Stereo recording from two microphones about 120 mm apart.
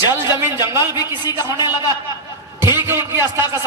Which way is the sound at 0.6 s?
20° right (ahead or behind).